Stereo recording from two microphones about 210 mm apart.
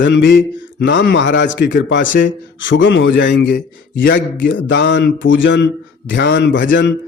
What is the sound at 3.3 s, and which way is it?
Speech, 40° left (ahead or behind).